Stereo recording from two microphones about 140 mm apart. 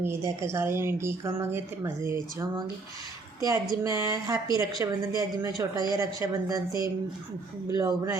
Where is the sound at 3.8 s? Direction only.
25° right (ahead or behind).